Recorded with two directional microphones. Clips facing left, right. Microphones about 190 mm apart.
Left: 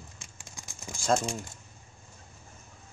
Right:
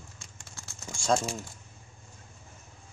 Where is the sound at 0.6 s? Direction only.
15° left (ahead or behind).